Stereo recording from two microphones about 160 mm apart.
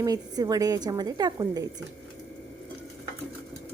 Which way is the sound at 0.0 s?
25° right (ahead or behind).